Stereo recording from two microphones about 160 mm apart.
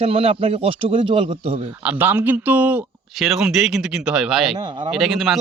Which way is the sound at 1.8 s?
10° right (ahead or behind).